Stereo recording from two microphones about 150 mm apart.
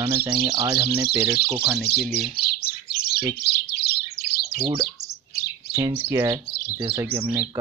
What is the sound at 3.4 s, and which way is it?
Speech, 90° left.